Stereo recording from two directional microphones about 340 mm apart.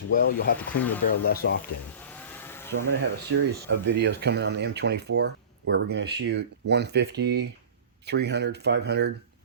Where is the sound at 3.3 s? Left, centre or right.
Right.